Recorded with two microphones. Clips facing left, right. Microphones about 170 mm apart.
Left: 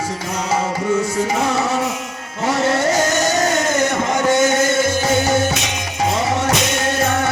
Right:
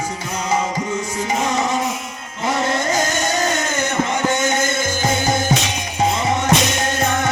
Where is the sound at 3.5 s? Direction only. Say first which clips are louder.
Left 4 dB; 35° left (ahead or behind).